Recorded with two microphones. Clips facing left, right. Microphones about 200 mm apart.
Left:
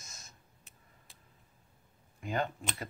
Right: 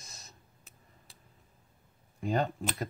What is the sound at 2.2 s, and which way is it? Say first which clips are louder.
Speech: right 4 dB; 35° right (ahead or behind).